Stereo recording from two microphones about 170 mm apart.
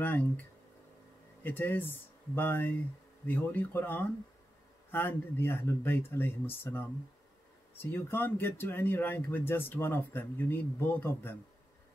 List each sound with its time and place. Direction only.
0.0 s speech: 10° left (ahead or behind)